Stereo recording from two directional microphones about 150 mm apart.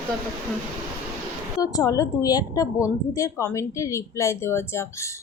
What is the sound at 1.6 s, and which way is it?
A woman's voice, 25° left (ahead or behind).